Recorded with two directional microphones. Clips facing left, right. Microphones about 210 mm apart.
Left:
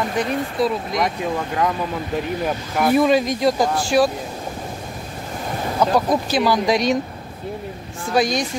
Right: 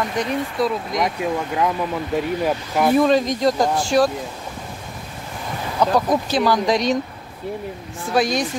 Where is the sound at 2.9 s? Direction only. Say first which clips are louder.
Left 1 dB; 10° left (ahead or behind).